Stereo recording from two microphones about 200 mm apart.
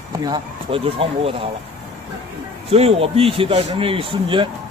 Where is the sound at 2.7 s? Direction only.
30° right (ahead or behind).